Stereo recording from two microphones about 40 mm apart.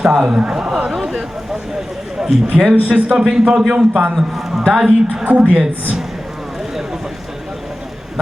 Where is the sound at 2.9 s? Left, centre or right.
Right.